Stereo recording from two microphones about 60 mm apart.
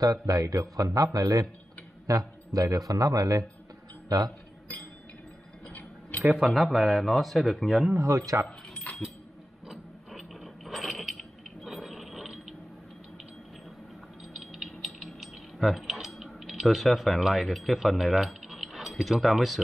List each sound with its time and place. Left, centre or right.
0.0 s a man's voice: right
5.7 s tick-tock: left
6.3 s speech: centre
8.3 s speech: right
9.7 s a sound: centre
14.3 s music: centre
15.6 s speech: centre